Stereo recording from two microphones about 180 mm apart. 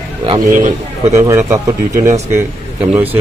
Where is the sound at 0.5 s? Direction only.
45° right (ahead or behind).